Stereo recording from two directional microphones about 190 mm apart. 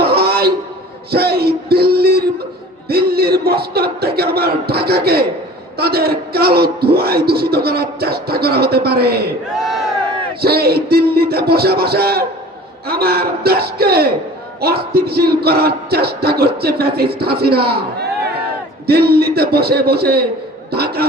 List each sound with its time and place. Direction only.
0.0 s a sound: 55° right (ahead or behind)
2.9 s a man's voice: 55° right (ahead or behind)
9.6 s crowd: centre (ahead or behind)
10.4 s a man's voice: 55° right (ahead or behind)
18.9 s a man's voice: 55° right (ahead or behind)